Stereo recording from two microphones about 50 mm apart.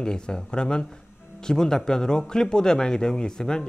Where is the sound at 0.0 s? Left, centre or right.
Centre.